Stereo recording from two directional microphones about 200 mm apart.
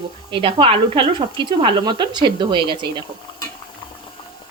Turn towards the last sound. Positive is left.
turn(degrees=-25)  # may be behind; listen again after turning